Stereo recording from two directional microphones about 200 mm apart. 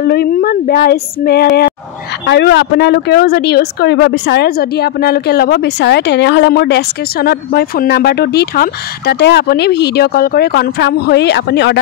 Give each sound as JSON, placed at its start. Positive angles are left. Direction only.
{"t": 0.0, "sound": "speech", "side_deg": 50}